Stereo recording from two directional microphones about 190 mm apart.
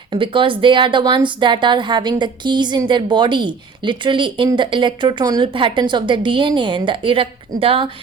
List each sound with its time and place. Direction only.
0.1 s a woman's voice: 25° right (ahead or behind)